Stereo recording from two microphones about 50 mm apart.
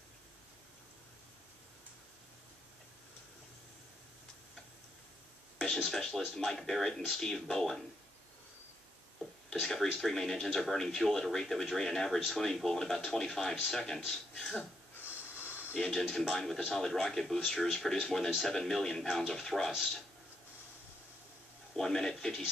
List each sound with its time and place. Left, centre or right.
5.6 s speech: centre
9.5 s speech: centre
15.0 s snort: left
15.9 s speech: centre
21.7 s speech: centre